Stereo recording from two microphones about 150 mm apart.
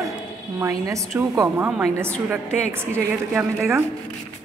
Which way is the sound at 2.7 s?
15° right (ahead or behind).